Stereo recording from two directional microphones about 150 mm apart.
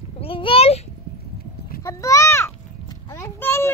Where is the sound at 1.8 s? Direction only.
20° left (ahead or behind).